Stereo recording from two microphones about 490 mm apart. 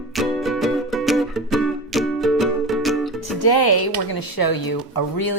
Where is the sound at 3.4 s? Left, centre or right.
Left.